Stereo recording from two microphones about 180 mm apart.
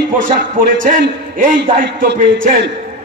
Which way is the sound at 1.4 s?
50° right (ahead or behind).